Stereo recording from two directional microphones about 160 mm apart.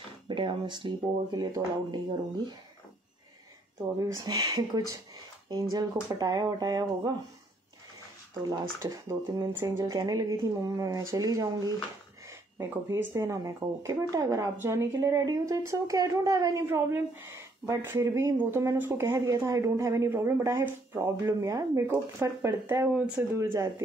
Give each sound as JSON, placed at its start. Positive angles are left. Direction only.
{"t": 0.3, "sound": "speech", "side_deg": -30}
{"t": 4.0, "sound": "speech", "side_deg": -25}
{"t": 8.4, "sound": "speech", "side_deg": -20}